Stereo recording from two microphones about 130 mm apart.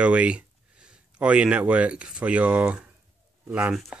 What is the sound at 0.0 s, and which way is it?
Speech, 10° right (ahead or behind).